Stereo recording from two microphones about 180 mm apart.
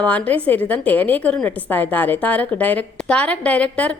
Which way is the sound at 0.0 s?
5° left (ahead or behind).